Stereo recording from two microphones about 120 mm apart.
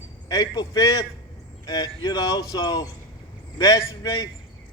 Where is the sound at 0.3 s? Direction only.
35° left (ahead or behind).